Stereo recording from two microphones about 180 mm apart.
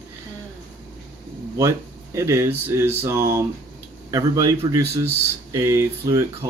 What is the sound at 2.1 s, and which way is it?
A man's voice, 15° right (ahead or behind).